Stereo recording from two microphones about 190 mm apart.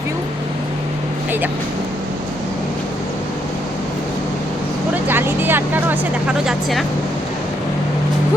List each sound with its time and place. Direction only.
5.0 s speech: 10° right (ahead or behind)